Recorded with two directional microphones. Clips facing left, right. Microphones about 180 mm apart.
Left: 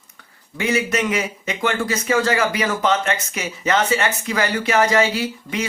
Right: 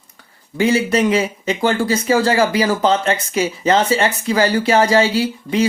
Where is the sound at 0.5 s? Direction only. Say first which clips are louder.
Right 5 dB; 30° right (ahead or behind).